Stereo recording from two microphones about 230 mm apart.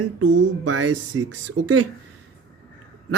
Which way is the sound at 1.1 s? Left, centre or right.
Right.